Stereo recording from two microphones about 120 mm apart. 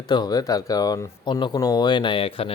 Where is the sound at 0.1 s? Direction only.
35° left (ahead or behind).